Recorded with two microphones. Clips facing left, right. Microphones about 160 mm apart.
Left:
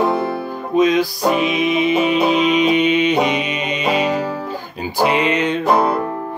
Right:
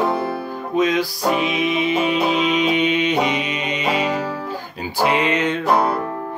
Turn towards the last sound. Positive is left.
turn(degrees=20)  # may be behind; listen again after turning